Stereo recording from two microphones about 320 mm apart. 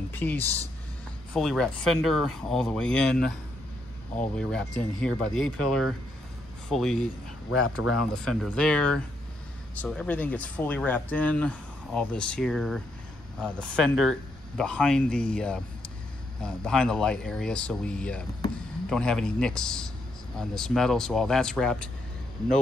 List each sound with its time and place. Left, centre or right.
0.1 s speech: centre
4.4 s speech: centre
7.5 s speech: left
8.1 s speech: centre